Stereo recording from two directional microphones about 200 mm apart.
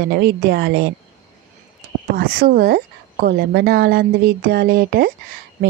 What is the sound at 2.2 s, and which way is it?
Speech, 50° right (ahead or behind).